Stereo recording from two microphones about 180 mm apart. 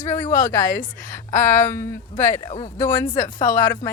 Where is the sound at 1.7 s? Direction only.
15° left (ahead or behind).